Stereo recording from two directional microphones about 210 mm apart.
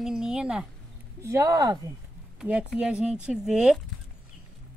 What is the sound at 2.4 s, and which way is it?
Speech, 5° right (ahead or behind).